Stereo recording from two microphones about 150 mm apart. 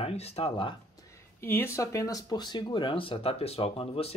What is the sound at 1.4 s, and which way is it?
Speech, 15° left (ahead or behind).